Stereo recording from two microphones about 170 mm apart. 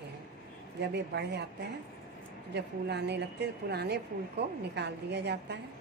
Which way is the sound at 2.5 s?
80° right.